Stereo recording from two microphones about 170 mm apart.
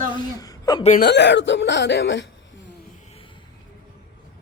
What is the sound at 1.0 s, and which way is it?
Speech, 80° left.